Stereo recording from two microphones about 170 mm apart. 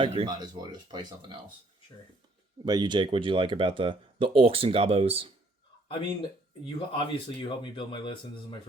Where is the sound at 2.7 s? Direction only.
25° right (ahead or behind).